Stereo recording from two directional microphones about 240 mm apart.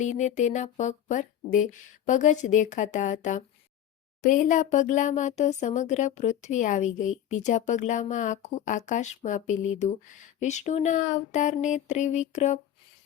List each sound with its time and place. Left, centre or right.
0.0 s a woman's voice: left